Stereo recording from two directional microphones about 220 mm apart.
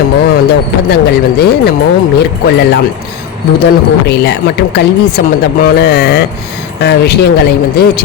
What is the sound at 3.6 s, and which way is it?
A woman's voice, 50° left (ahead or behind).